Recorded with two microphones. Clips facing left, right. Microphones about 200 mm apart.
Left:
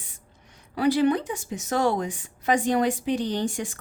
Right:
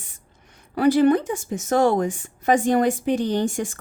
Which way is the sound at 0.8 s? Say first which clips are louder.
Right 5 dB; 50° right (ahead or behind).